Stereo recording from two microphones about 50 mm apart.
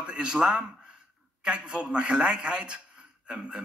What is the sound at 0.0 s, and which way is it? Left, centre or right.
A man's voice, centre.